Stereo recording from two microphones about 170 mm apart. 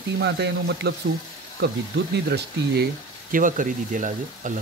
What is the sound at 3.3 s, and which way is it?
Speech, 50° right (ahead or behind).